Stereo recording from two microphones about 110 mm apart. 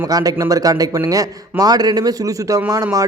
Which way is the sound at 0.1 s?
35° right (ahead or behind).